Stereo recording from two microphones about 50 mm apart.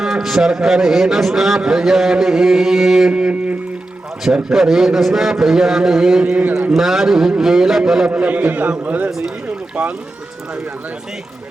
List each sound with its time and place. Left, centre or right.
0.0 s a man's voice: centre
3.1 s a sound: right
4.4 s a man's voice: centre
6.3 s a man's voice: right
6.7 s a man's voice: centre
8.1 s a man's voice: right
9.0 s a man's voice: centre